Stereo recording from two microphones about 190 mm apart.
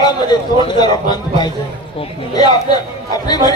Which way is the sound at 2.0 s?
20° left (ahead or behind).